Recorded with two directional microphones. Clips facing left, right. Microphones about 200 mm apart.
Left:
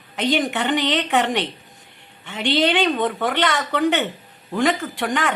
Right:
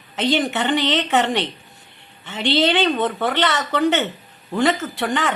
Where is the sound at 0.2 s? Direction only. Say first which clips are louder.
Right 1 dB; 15° left (ahead or behind).